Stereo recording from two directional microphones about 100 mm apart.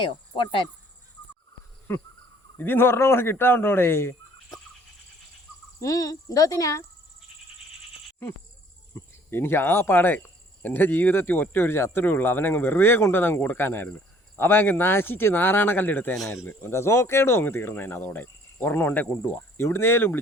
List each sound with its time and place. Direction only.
1.9 s speech: 20° left (ahead or behind)
5.8 s speech: 35° left (ahead or behind)
9.3 s speech: 25° left (ahead or behind)